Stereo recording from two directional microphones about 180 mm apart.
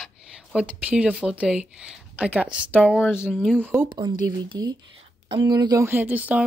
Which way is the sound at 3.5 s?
10° right (ahead or behind).